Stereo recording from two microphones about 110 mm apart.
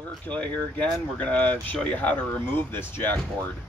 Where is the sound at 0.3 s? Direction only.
10° left (ahead or behind).